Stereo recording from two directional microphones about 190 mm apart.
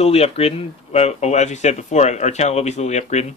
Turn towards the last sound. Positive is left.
turn(degrees=35)  # may be behind; listen again after turning